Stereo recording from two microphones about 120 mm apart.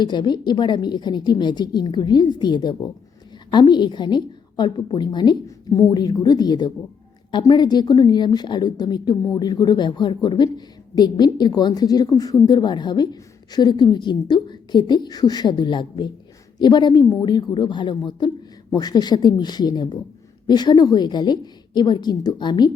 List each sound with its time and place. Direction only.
0.0 s a woman's voice: 40° left (ahead or behind)